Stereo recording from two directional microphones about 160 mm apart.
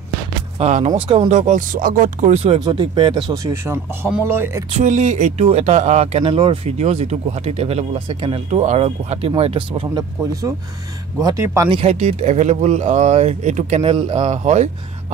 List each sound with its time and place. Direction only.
0.6 s speech: 50° right (ahead or behind)
0.9 s speech: 35° right (ahead or behind)
1.5 s speech: 55° right (ahead or behind); by 3.5 s 30° right (ahead or behind)
3.6 s speech: 15° right (ahead or behind)
4.7 s speech: 45° right (ahead or behind)
11.1 s speech: 25° right (ahead or behind)
11.7 s speech: 45° right (ahead or behind)